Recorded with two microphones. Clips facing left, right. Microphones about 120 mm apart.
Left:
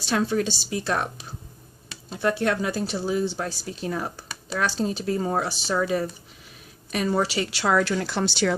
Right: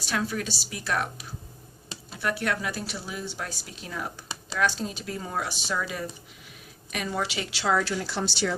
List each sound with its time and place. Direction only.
0.0 s speech: 30° left (ahead or behind); by 8.5 s 60° left (ahead or behind)